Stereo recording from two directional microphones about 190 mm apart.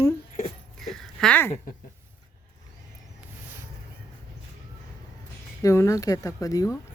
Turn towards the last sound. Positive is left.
turn(degrees=15)  # may be behind; listen again after turning